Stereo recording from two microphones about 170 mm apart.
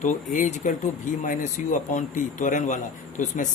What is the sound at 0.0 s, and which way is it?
Speech, 45° left (ahead or behind).